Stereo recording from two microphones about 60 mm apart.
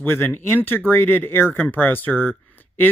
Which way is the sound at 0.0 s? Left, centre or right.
Left.